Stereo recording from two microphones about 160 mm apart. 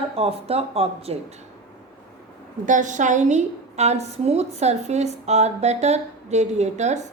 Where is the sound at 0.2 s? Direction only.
40° right (ahead or behind).